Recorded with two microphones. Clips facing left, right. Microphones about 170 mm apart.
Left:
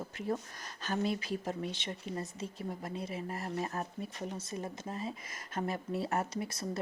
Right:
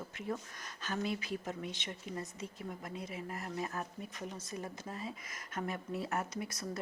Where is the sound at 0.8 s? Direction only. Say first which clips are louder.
Left 4 dB; 35° left (ahead or behind).